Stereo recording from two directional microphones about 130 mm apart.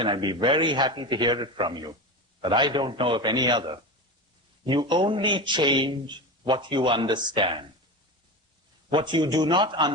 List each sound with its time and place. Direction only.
0.0 s a man's voice: 35° right (ahead or behind)
8.9 s a man's voice: 35° right (ahead or behind)